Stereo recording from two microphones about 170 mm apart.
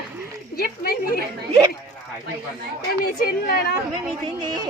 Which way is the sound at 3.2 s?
65° left (ahead or behind).